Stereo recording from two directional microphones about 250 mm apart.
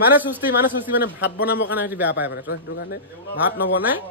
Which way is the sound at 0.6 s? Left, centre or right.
Left.